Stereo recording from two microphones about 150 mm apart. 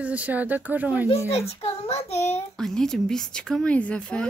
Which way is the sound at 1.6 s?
40° left (ahead or behind).